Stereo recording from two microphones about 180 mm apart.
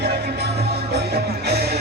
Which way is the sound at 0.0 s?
65° right (ahead or behind).